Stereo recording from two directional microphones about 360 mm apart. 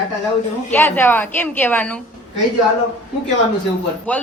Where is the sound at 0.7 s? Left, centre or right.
Centre.